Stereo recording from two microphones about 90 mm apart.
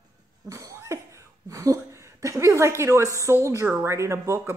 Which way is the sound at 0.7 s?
35° right (ahead or behind).